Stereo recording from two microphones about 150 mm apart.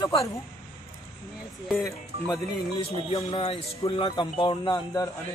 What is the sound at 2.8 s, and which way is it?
A woman's voice, 40° left (ahead or behind).